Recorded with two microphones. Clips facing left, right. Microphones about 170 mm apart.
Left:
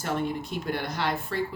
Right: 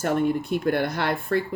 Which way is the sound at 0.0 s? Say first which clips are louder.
Right 6 dB; 55° right (ahead or behind).